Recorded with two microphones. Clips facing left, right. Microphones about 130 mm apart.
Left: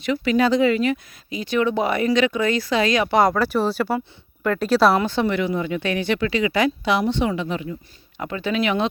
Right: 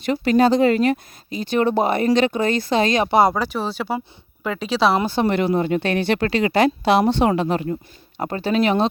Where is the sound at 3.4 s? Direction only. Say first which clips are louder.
Left 4 dB; 5° left (ahead or behind).